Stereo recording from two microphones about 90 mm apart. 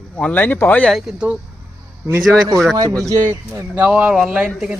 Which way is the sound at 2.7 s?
45° right (ahead or behind).